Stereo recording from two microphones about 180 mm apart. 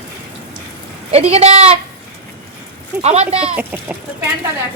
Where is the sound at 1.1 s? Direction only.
35° right (ahead or behind).